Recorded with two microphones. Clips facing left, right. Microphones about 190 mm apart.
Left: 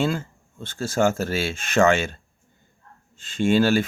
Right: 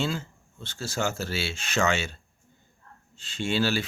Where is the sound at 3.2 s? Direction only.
50° left (ahead or behind).